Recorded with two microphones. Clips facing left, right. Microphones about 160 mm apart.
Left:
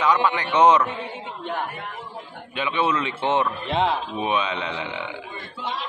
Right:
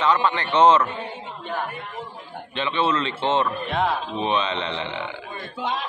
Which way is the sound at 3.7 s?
25° left (ahead or behind).